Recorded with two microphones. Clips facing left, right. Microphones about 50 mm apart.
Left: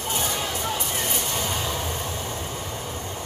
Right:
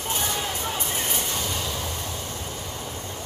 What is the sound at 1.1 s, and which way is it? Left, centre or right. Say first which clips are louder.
Train: left 1 dB; left.